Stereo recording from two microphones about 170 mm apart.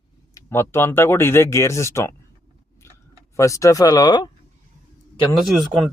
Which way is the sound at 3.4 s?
20° left (ahead or behind).